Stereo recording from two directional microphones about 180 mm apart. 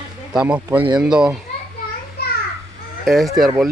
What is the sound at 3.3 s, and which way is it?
Speech, centre (ahead or behind).